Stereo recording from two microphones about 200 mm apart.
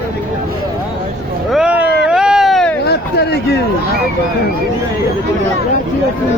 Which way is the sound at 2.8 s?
55° left (ahead or behind).